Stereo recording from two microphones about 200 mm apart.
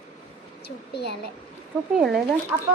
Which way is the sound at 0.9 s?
55° left (ahead or behind).